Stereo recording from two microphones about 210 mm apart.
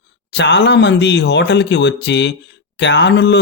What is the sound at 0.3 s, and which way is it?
A man's voice, 55° left (ahead or behind).